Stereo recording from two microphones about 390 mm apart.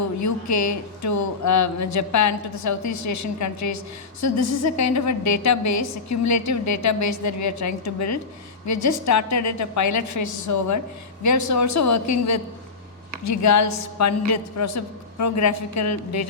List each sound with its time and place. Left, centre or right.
0.0 s a woman's voice: left